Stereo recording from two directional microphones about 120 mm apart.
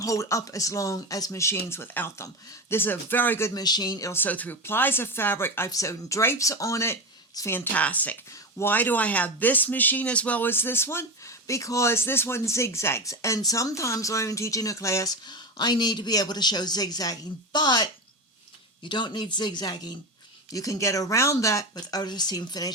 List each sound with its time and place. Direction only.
0.0 s speech: 25° left (ahead or behind)
3.5 s a man's voice: 35° left (ahead or behind)
4.1 s speech: 15° left (ahead or behind)
15.3 s a man's voice: 35° left (ahead or behind)